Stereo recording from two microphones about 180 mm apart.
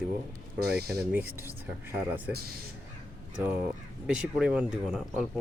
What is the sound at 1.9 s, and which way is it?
Speech, 10° right (ahead or behind).